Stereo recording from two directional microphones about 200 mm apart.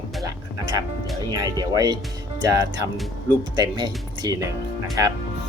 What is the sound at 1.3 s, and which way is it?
Speech, 20° right (ahead or behind).